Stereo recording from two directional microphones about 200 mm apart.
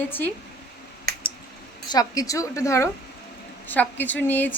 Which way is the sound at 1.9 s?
20° left (ahead or behind).